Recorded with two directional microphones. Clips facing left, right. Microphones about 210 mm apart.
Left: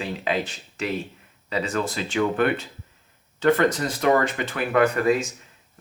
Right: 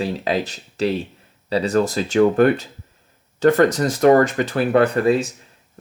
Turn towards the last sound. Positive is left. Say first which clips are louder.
# right 3 dB
turn(degrees=-30)  # may be behind; listen again after turning